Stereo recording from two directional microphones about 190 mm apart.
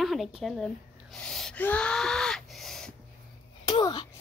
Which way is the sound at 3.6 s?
25° left (ahead or behind).